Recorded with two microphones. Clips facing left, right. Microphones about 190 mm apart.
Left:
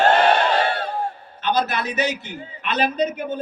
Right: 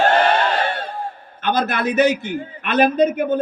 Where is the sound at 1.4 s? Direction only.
55° right (ahead or behind).